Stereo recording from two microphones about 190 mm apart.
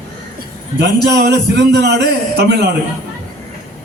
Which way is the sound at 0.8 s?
60° right (ahead or behind).